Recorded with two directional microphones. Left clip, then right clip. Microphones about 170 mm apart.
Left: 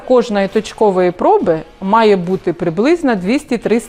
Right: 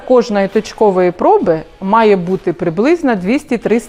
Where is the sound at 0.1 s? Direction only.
40° right (ahead or behind).